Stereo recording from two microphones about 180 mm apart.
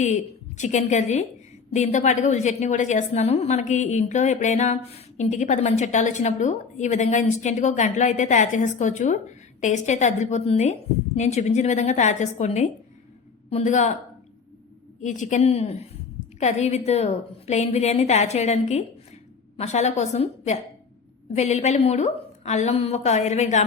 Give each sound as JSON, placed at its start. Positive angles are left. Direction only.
{"t": 0.0, "sound": "a woman's voice", "side_deg": 40}
{"t": 15.0, "sound": "a woman's voice", "side_deg": 45}
{"t": 21.3, "sound": "a woman's voice", "side_deg": 40}